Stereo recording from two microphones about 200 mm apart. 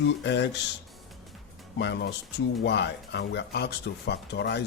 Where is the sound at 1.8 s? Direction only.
60° left (ahead or behind).